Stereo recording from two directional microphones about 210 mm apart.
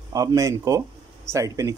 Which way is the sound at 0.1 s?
15° right (ahead or behind).